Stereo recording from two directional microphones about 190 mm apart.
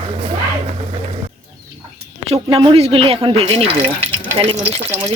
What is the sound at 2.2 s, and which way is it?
Speech, 30° right (ahead or behind).